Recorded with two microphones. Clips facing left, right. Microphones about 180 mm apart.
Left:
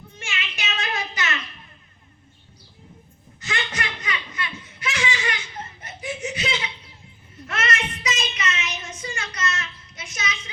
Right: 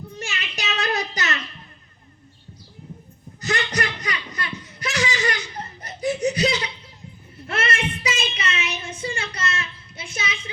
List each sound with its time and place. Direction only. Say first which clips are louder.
0.2 s child singing: right 1 dB; 40° right (ahead or behind)
3.4 s a sound: right 5 dB; 40° right (ahead or behind)
7.4 s child singing: right 2 dB; 30° right (ahead or behind)